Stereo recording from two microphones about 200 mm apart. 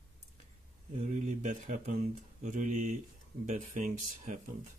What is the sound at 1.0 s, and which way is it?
Speech, 40° right (ahead or behind).